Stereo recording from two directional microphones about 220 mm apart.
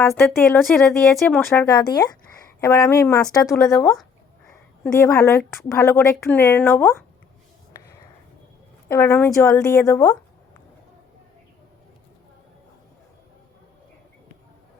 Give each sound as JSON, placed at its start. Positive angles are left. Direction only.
{"t": 0.1, "sound": "speech", "side_deg": 10}
{"t": 1.6, "sound": "a woman's voice", "side_deg": 20}
{"t": 8.9, "sound": "a woman's voice", "side_deg": 10}